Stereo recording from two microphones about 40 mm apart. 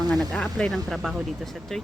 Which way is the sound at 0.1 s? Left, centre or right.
Centre.